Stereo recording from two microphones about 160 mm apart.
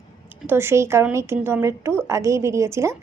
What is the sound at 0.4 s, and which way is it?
A woman's voice, 15° right (ahead or behind).